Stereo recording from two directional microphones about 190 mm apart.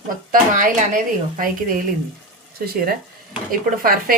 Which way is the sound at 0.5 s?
40° right (ahead or behind).